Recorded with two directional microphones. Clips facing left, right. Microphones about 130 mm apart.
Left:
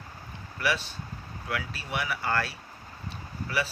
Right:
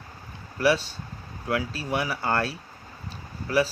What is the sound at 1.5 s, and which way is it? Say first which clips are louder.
Speech: right 7 dB; 35° right (ahead or behind).